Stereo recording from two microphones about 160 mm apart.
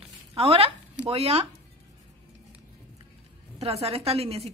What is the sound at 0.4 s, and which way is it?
Speech, 35° right (ahead or behind).